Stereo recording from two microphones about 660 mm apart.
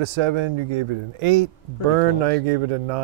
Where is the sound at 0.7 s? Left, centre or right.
Right.